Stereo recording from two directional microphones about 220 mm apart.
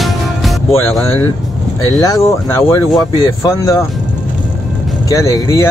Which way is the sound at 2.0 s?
15° left (ahead or behind).